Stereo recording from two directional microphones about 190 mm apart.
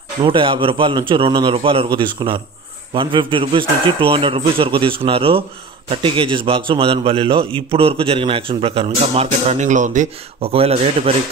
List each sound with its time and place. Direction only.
0.2 s a man's voice: 25° right (ahead or behind)